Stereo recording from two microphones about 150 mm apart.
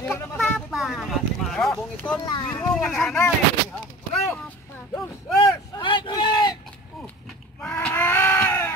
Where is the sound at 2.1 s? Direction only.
30° left (ahead or behind).